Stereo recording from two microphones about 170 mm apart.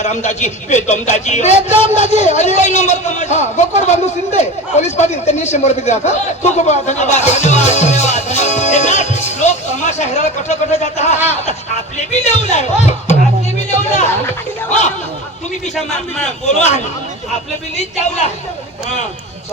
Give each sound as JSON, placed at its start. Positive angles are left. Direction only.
{"t": 0.0, "sound": "speech", "side_deg": 45}
{"t": 13.7, "sound": "music", "side_deg": 40}
{"t": 14.7, "sound": "speech", "side_deg": 40}
{"t": 16.6, "sound": "speech", "side_deg": 40}